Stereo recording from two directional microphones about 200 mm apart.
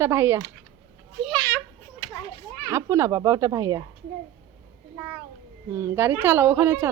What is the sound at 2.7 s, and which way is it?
A woman's voice, 15° right (ahead or behind).